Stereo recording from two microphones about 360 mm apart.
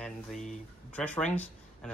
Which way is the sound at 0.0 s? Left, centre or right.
Centre.